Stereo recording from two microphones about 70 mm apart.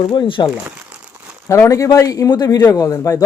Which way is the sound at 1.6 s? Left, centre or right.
Left.